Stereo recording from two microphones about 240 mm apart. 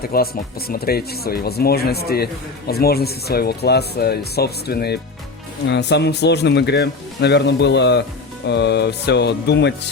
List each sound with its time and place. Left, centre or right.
0.1 s speech: left